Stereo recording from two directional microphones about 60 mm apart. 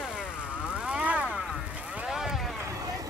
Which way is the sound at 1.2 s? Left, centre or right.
Centre.